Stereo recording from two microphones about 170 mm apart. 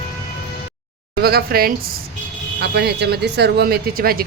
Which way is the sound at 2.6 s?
80° right.